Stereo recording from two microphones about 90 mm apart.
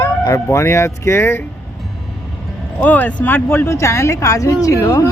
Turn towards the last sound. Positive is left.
turn(degrees=40)  # may be behind; listen again after turning